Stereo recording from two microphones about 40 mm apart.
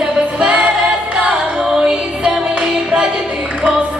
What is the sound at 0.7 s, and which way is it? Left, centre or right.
Choir, right.